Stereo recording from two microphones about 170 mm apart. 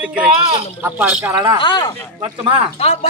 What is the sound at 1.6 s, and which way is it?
Speech, 25° left (ahead or behind).